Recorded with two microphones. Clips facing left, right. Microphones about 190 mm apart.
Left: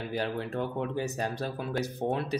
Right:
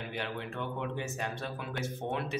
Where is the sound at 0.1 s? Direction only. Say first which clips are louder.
Left 8 dB; 35° left (ahead or behind).